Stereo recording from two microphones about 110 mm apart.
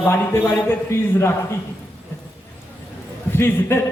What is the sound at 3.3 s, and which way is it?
Speech, 20° left (ahead or behind).